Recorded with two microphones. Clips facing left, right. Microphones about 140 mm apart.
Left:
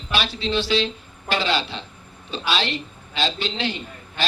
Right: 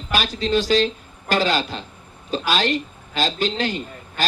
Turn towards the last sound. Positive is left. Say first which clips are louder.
# right 4 dB
turn(degrees=-45)  # may be behind; listen again after turning